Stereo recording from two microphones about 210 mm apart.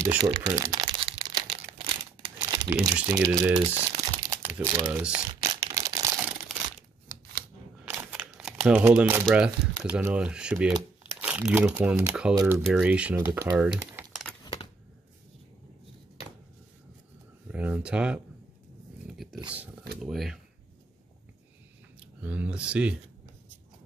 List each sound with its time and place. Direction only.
0.0 s speech: 15° right (ahead or behind)
0.5 s crumpling: 15° right (ahead or behind)
3.0 s speech: 10° right (ahead or behind)
5.4 s a sound: 15° right (ahead or behind)
7.9 s crumpling: 10° right (ahead or behind)
9.8 s speech: 5° right (ahead or behind)
17.5 s speech: 5° right (ahead or behind)
19.0 s a sound: centre (ahead or behind)
20.0 s speech: centre (ahead or behind)
22.0 s speech: 5° right (ahead or behind)